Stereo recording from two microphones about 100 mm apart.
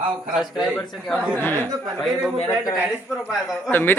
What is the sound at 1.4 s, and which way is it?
Speech, 20° left (ahead or behind).